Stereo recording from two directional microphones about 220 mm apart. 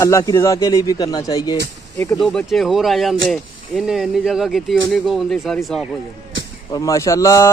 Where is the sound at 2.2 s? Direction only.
Centre (ahead or behind).